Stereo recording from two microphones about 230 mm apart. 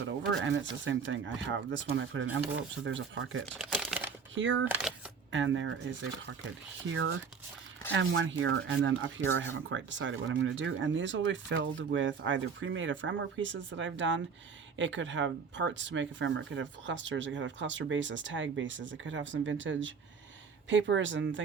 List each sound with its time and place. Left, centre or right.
0.0 s speech: right
3.4 s shuffling cards: centre
4.4 s speech: right
4.7 s speech: centre
5.3 s speech: right